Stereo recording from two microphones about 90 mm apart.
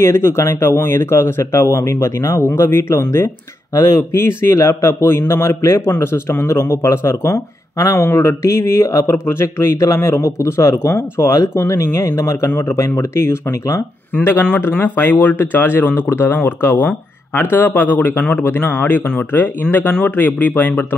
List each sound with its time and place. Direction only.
0.0 s speech: 30° left (ahead or behind)